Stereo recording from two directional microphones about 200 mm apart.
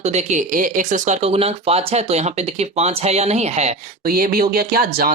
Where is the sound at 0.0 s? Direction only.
35° right (ahead or behind).